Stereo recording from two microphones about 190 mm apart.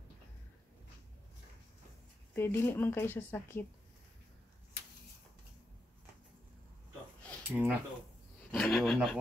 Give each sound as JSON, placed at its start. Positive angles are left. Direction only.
{"t": 2.3, "sound": "a woman's voice", "side_deg": 10}
{"t": 7.4, "sound": "speech", "side_deg": -10}
{"t": 8.5, "sound": "speech", "side_deg": 0}